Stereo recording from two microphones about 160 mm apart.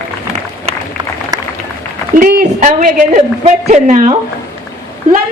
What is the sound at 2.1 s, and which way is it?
A woman's voice, 60° right (ahead or behind).